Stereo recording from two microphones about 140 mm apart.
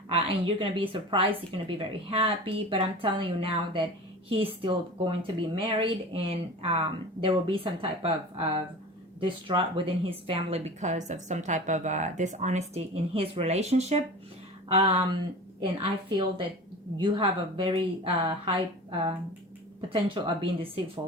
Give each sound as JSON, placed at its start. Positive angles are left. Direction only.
{"t": 0.1, "sound": "a woman's voice", "side_deg": -45}
{"t": 14.7, "sound": "a woman's voice", "side_deg": -40}